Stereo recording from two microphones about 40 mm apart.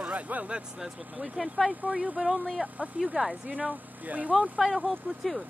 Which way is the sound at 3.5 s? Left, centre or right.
Right.